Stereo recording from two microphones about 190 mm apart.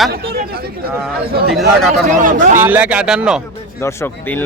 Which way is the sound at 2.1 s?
40° right (ahead or behind).